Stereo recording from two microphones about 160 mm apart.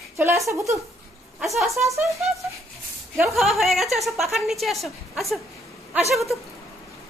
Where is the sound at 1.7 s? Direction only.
20° right (ahead or behind).